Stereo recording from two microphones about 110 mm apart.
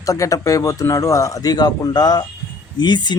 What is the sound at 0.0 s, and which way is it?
Speech, 30° left (ahead or behind).